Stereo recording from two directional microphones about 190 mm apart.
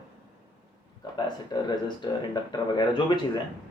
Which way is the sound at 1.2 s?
25° left (ahead or behind).